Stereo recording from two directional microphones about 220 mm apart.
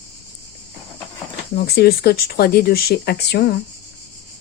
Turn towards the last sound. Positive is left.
turn(degrees=45)  # may be behind; listen again after turning